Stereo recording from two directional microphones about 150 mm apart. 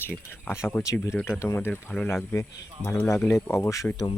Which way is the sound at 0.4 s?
15° left (ahead or behind).